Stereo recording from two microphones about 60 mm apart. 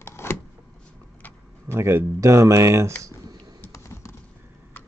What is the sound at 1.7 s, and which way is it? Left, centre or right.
Speech, right.